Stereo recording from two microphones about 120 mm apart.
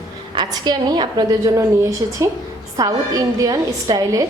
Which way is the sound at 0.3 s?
35° right (ahead or behind).